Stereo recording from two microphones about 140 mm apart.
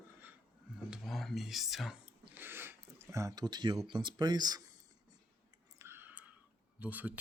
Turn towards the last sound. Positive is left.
turn(degrees=-10)  # may be behind; listen again after turning